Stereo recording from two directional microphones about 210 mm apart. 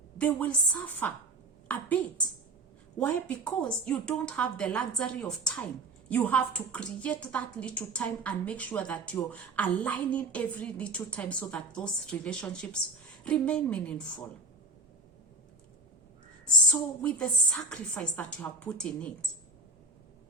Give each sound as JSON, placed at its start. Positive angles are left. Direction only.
{"t": 0.2, "sound": "a woman's voice", "side_deg": 5}
{"t": 17.0, "sound": "a woman's voice", "side_deg": 5}